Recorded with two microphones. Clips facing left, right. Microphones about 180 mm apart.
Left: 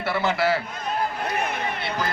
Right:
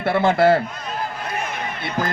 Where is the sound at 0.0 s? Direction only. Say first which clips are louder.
Right 7 dB; 50° right (ahead or behind).